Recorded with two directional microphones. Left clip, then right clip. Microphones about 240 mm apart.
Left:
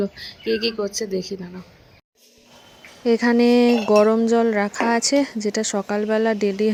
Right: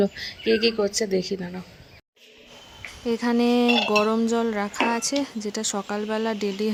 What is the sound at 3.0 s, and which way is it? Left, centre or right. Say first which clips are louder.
Speech: left 6 dB; centre.